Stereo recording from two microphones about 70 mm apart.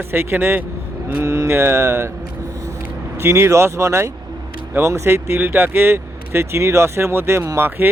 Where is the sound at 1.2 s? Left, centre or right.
Right.